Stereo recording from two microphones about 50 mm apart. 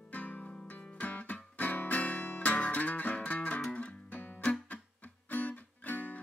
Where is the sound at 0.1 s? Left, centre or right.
Left.